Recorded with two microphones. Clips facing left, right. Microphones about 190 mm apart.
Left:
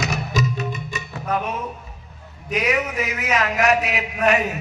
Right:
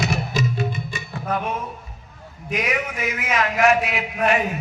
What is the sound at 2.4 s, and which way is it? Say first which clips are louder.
A man's voice: left 3 dB; 40° left (ahead or behind).